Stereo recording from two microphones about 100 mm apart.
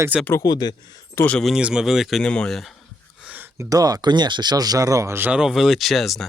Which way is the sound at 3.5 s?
35° right (ahead or behind).